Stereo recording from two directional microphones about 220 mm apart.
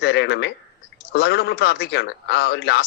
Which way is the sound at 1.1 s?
50° left (ahead or behind).